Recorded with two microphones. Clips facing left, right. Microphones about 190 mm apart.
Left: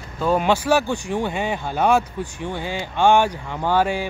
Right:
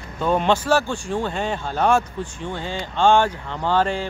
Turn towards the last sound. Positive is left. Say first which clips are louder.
# left 1 dB
turn(degrees=10)  # may be behind; listen again after turning